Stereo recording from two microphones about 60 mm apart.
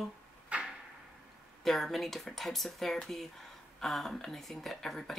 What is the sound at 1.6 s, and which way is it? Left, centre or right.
Speech, centre.